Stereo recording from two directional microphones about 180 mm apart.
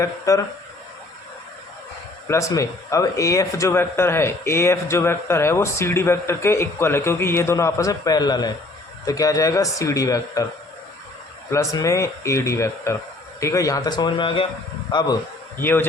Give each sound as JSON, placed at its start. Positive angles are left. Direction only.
{"t": 0.0, "sound": "speech", "side_deg": 20}
{"t": 2.2, "sound": "speech", "side_deg": 15}
{"t": 11.5, "sound": "speech", "side_deg": 15}
{"t": 15.5, "sound": "speech", "side_deg": 10}